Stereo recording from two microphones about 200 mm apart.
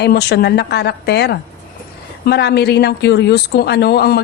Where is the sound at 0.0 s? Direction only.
55° left (ahead or behind).